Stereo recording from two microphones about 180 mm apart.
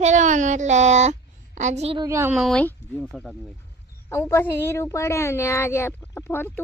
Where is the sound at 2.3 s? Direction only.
Centre (ahead or behind).